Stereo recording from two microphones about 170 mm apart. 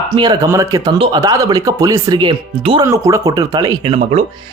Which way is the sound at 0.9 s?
30° right (ahead or behind).